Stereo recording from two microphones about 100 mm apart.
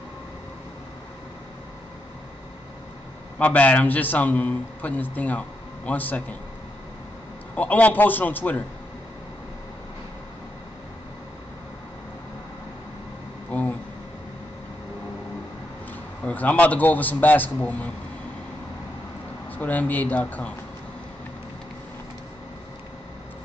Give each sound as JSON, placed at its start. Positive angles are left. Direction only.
{"t": 3.3, "sound": "a man's voice", "side_deg": 15}
{"t": 7.5, "sound": "a man's voice", "side_deg": 15}
{"t": 13.5, "sound": "a sound", "side_deg": 15}
{"t": 16.3, "sound": "a man's voice", "side_deg": 15}
{"t": 19.5, "sound": "a man's voice", "side_deg": 15}